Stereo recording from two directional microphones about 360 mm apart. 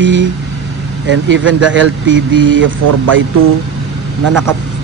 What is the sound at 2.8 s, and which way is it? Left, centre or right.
Speech, right.